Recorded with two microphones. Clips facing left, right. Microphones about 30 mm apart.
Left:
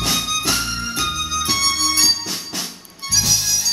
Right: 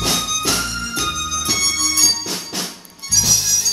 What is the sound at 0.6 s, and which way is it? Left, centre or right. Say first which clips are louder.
Music: even; centre.